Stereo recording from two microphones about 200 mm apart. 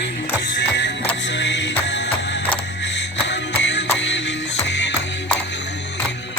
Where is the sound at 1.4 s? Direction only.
65° left (ahead or behind).